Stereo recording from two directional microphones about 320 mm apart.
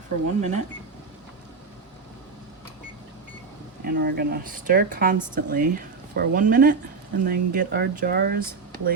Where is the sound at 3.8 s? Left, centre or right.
Right.